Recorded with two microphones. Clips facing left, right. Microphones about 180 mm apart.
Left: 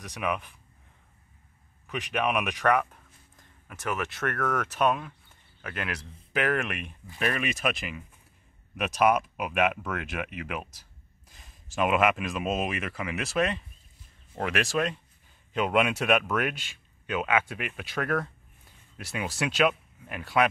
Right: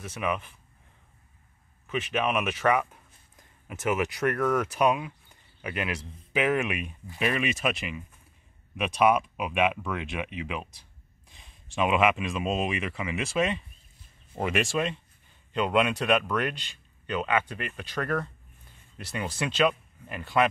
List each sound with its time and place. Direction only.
0.0 s speech: centre (ahead or behind)
1.9 s speech: centre (ahead or behind)
3.3 s speech: 20° right (ahead or behind); by 20.4 s centre (ahead or behind)